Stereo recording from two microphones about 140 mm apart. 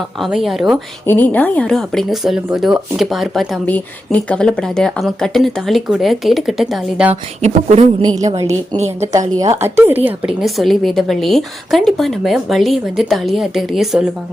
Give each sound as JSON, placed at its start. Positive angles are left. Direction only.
{"t": 0.2, "sound": "speech", "side_deg": 0}
{"t": 1.0, "sound": "speech", "side_deg": 15}
{"t": 7.4, "sound": "speech", "side_deg": -55}
{"t": 8.0, "sound": "a woman's voice", "side_deg": -25}
{"t": 10.4, "sound": "speech", "side_deg": 0}